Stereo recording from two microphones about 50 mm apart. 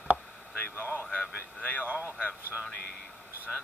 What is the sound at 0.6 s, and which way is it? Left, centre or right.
Speech, left.